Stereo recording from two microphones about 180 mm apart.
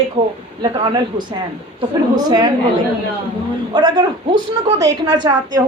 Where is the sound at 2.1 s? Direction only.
25° right (ahead or behind).